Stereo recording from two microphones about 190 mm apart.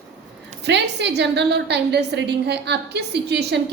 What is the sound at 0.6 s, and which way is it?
A woman's voice, 65° right (ahead or behind).